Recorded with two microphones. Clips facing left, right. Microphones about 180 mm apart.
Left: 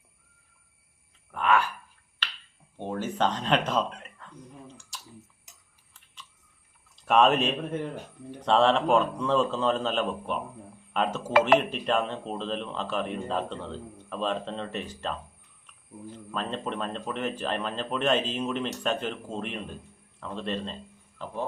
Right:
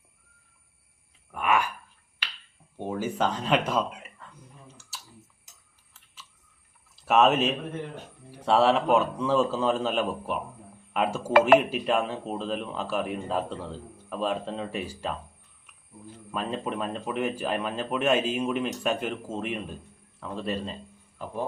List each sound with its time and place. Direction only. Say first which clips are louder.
1.3 s a sound: left 1 dB; 10° right (ahead or behind)
2.2 s finger snapping: left 2 dB; 10° right (ahead or behind)
2.7 s speech: right 1 dB; 10° right (ahead or behind)
4.9 s tick: even; 5° right (ahead or behind)
6.9 s a man's voice: even; 5° right (ahead or behind)
11.3 s speech: right 3 dB; 55° right (ahead or behind)
11.6 s a man's voice: right 1 dB; 10° right (ahead or behind)
16.3 s a man's voice: right 2 dB; 10° right (ahead or behind)